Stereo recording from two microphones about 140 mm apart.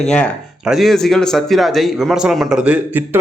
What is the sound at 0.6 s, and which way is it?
A man's voice, centre (ahead or behind).